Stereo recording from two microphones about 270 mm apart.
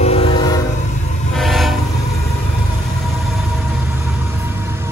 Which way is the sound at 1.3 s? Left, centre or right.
Centre.